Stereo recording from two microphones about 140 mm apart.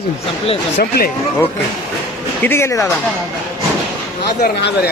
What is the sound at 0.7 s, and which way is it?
Speech, 90° left.